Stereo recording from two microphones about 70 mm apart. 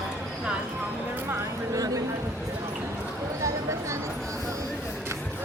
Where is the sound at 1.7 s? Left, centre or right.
Right.